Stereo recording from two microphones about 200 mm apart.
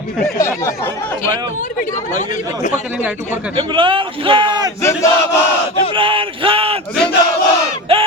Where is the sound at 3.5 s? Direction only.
25° right (ahead or behind).